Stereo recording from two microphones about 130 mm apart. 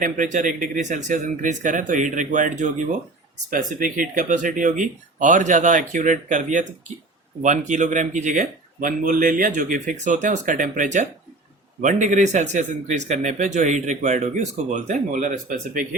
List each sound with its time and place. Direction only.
0.0 s speech: 85° right
3.5 s speech: 90° right